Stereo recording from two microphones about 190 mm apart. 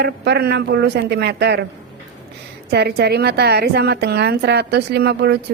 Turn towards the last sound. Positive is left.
turn(degrees=-60)  # may be behind; listen again after turning